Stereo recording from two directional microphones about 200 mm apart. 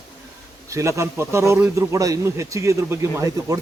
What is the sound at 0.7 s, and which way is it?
Speech, 15° right (ahead or behind).